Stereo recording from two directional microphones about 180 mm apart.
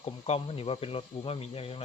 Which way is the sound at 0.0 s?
35° left (ahead or behind).